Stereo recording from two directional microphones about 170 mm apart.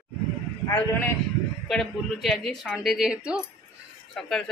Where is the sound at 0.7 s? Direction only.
15° left (ahead or behind).